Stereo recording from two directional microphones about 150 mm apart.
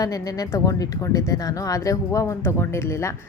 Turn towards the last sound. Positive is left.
turn(degrees=15)  # may be behind; listen again after turning